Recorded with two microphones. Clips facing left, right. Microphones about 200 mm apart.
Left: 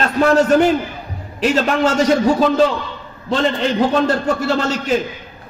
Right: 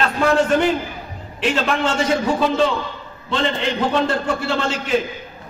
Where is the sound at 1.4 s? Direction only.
40° left (ahead or behind).